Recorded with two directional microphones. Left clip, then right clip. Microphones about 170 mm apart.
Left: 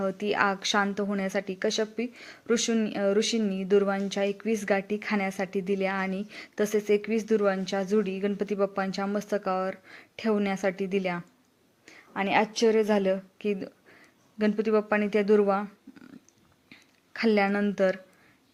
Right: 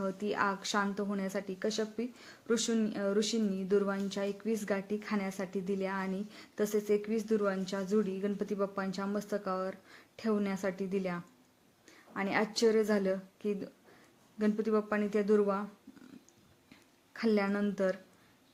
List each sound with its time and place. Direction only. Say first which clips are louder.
0.0 s a woman's voice: left 7 dB; 20° left (ahead or behind)
17.2 s a woman's voice: left 7 dB; 20° left (ahead or behind)